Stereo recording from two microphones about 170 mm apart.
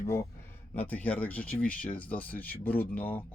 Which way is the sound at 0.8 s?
10° left (ahead or behind).